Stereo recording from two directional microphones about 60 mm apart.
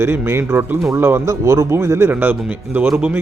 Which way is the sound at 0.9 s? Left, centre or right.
Right.